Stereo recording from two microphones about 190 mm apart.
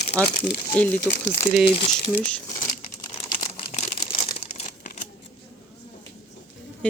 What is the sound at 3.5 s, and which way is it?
Crumpling, 35° left (ahead or behind).